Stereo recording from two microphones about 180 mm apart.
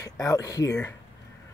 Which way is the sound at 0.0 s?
20° left (ahead or behind).